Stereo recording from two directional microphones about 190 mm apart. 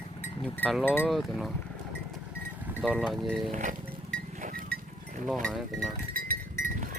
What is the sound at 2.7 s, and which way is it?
Speech, 5° right (ahead or behind).